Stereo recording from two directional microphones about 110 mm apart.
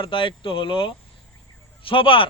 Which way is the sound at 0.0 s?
50° left (ahead or behind).